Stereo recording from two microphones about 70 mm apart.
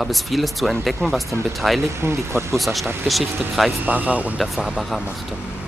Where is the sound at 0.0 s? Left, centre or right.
Centre.